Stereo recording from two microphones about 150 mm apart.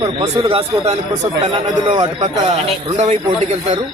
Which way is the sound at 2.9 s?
50° right (ahead or behind).